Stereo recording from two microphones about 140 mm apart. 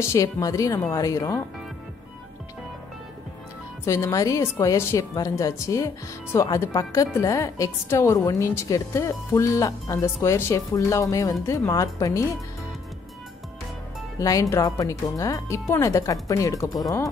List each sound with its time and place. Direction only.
0.0 s a woman's voice: 20° left (ahead or behind)
3.8 s a woman's voice: 20° left (ahead or behind)
14.2 s a woman's voice: 25° left (ahead or behind)